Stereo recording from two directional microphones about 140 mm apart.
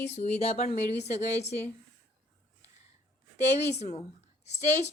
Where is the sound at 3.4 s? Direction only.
50° left (ahead or behind).